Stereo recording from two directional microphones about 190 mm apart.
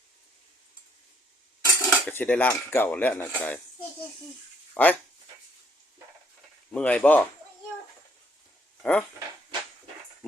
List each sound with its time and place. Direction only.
1.6 s cutlery: 20° left (ahead or behind)
2.0 s dishes: 10° left (ahead or behind)
4.7 s speech: 10° left (ahead or behind)
6.7 s dishes: 5° left (ahead or behind)
8.8 s speech: 5° left (ahead or behind)